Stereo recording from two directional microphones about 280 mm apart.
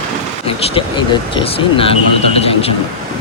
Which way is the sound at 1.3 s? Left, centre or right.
Centre.